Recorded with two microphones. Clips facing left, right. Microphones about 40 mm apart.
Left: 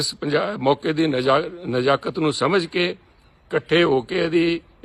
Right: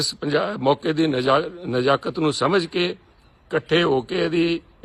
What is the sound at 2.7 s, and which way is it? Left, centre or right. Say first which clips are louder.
Speech: left 1 dB; centre.